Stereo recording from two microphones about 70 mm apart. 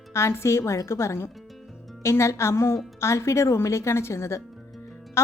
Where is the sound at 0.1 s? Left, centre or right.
Left.